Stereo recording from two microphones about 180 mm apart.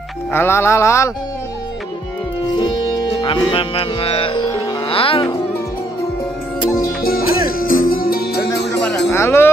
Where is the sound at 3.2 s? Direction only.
25° left (ahead or behind).